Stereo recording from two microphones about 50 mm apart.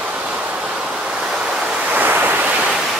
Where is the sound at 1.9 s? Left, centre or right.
Right.